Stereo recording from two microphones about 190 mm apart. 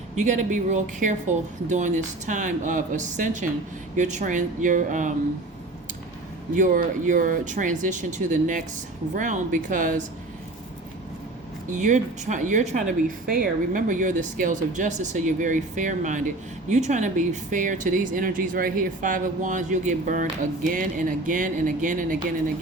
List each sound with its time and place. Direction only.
0.2 s speech: 40° right (ahead or behind)
6.6 s speech: 45° right (ahead or behind)
11.7 s speech: 40° right (ahead or behind)